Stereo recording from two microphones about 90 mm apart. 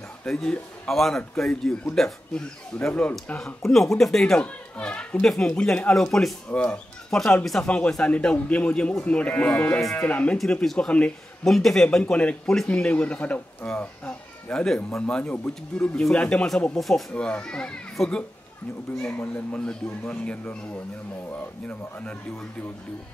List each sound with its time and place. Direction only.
0.2 s speech: 10° left (ahead or behind)
10.3 s a child's voice: 5° left (ahead or behind)